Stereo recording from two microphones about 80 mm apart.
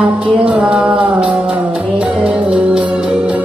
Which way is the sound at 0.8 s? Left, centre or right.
Centre.